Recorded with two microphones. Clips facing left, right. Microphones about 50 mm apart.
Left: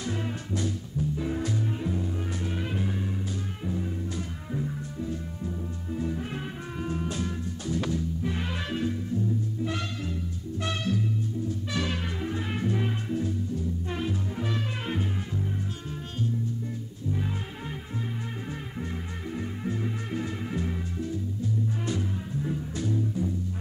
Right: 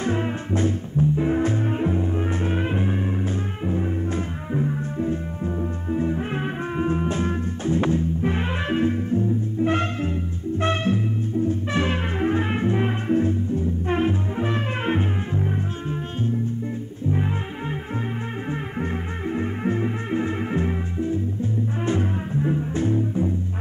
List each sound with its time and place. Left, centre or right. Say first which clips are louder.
0.0 s music: right 8 dB; right
19.3 s music: right 8 dB; right